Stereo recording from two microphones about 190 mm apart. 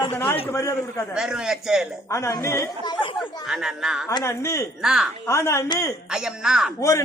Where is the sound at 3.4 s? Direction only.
Centre (ahead or behind).